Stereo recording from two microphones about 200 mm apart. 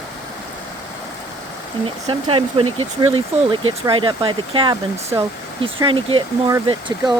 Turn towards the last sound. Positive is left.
turn(degrees=-20)  # may be behind; listen again after turning